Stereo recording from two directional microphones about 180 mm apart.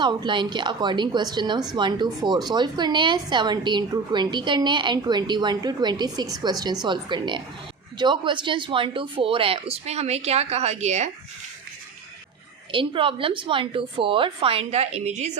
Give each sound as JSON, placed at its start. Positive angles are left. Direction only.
{"t": 0.0, "sound": "a woman's voice", "side_deg": -25}
{"t": 12.7, "sound": "a woman's voice", "side_deg": -30}